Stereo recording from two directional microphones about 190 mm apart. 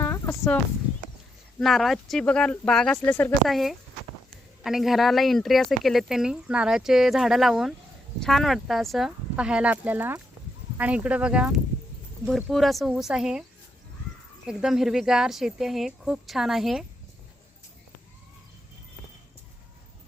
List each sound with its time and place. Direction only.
0.0 s a sound: 15° left (ahead or behind)
1.5 s speech: centre (ahead or behind)
14.4 s speech: centre (ahead or behind)